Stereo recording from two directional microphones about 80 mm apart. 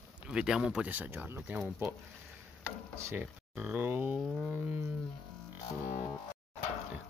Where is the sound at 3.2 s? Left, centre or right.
Right.